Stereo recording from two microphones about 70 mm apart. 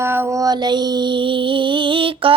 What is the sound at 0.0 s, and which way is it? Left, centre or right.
Child singing, right.